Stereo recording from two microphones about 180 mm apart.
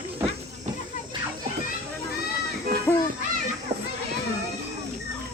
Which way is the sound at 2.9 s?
10° left (ahead or behind).